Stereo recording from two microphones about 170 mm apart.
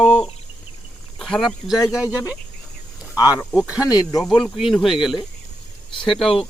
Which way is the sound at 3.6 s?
5° right (ahead or behind).